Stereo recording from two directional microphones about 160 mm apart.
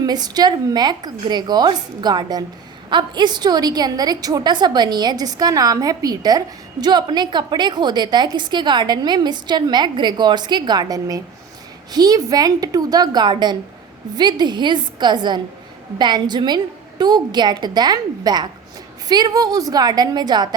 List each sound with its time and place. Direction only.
0.0 s a woman's voice: 25° right (ahead or behind)